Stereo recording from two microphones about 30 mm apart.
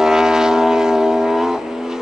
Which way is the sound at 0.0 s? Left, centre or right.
Right.